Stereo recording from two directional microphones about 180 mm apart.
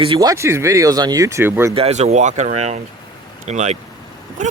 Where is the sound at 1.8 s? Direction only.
35° right (ahead or behind).